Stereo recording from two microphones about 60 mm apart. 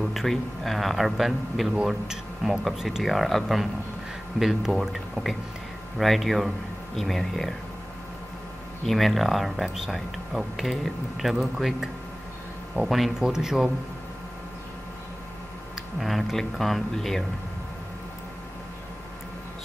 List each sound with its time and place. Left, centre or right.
0.0 s speech: centre
8.8 s speech: centre
16.0 s speech: centre